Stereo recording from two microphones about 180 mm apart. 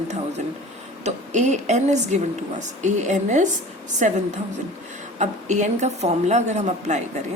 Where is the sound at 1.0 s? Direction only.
40° right (ahead or behind).